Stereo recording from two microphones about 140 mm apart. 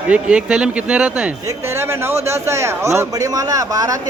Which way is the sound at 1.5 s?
20° right (ahead or behind).